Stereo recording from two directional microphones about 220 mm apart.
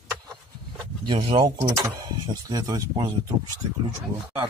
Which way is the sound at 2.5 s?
20° right (ahead or behind).